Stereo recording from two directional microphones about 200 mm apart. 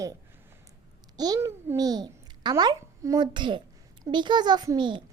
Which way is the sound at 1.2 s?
15° right (ahead or behind).